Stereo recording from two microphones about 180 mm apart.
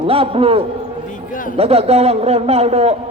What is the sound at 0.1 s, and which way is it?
A man's voice, 30° right (ahead or behind).